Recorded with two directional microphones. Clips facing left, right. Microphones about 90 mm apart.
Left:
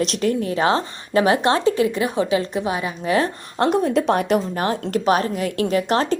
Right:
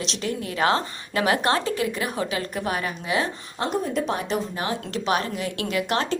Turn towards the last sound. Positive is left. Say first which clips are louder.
# left 5 dB
turn(degrees=35)  # may be behind; listen again after turning